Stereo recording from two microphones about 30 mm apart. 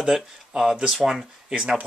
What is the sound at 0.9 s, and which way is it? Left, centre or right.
Speech, centre.